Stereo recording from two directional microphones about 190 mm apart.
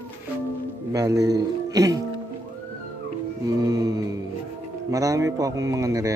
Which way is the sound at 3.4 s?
20° right (ahead or behind).